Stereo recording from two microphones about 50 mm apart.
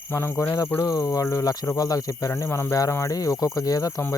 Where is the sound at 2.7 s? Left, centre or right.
Left.